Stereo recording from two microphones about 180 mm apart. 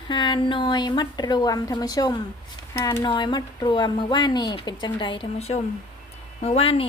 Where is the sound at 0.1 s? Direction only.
25° left (ahead or behind).